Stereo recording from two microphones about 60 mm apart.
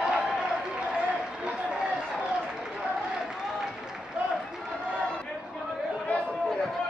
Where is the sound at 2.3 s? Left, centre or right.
Centre.